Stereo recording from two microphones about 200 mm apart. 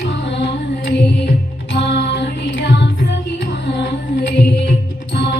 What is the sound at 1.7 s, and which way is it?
Music, 60° left (ahead or behind).